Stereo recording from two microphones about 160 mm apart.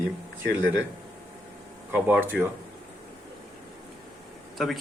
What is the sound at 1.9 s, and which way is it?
Speech, 10° right (ahead or behind).